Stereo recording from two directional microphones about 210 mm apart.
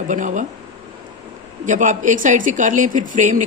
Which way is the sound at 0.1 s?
35° right (ahead or behind).